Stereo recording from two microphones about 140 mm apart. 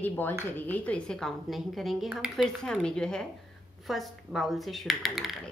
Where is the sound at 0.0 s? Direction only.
15° left (ahead or behind).